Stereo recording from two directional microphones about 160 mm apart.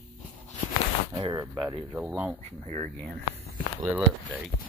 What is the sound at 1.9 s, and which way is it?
Speech, 10° right (ahead or behind).